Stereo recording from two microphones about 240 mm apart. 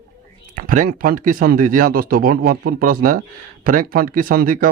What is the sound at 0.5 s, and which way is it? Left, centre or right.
Speech, right.